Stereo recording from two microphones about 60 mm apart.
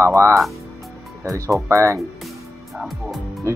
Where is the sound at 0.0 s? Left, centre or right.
Right.